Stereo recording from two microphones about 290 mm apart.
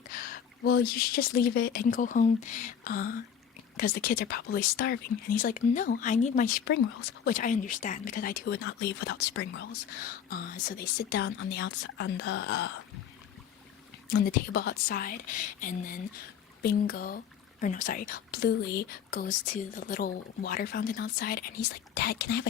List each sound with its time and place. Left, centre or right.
0.1 s a woman's voice: left
14.1 s a woman's voice: left